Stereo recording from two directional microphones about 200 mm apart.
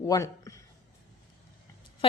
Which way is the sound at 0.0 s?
15° left (ahead or behind).